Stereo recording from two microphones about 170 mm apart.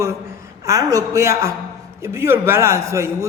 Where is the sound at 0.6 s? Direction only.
20° right (ahead or behind).